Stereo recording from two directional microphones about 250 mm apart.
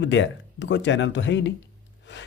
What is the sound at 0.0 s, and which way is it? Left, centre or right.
Speech, left.